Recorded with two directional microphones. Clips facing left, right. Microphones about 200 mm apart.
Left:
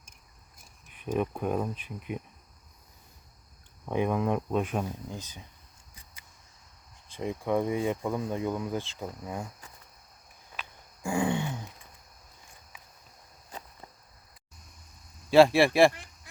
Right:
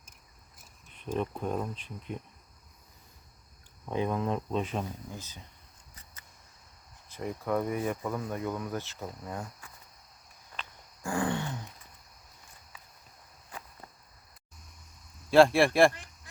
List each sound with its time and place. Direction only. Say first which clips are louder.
0.9 s speech: left 3 dB; 10° left (ahead or behind)
3.8 s speech: left 3 dB; 15° left (ahead or behind)
7.2 s speech: left 3 dB; 20° left (ahead or behind)
10.6 s a sound: left 2 dB; 10° left (ahead or behind)
15.3 s speech: left 2 dB; centre (ahead or behind)